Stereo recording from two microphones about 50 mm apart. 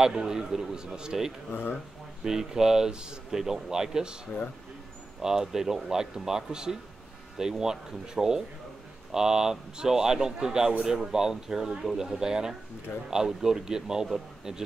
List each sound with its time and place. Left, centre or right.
0.0 s speech: centre
1.5 s speech: left
2.2 s speech: centre
5.2 s a man's voice: centre